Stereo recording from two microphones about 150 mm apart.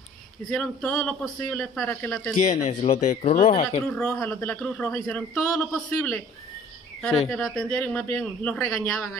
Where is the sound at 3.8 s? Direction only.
5° left (ahead or behind).